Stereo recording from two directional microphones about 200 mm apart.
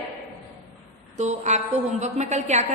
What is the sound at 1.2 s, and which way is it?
A woman's voice, 35° right (ahead or behind).